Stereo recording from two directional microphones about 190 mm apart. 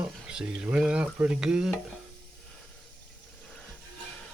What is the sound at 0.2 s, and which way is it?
Stir, 5° right (ahead or behind).